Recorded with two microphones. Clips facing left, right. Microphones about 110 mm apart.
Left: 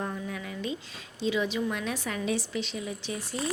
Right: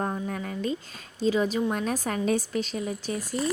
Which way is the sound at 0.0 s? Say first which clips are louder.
Right 4 dB; 45° right (ahead or behind).